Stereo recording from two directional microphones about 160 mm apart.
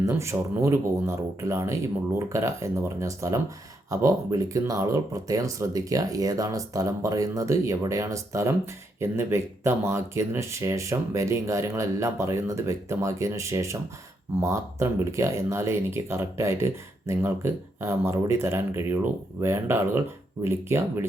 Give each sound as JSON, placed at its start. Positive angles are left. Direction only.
{"t": 0.0, "sound": "speech", "side_deg": -15}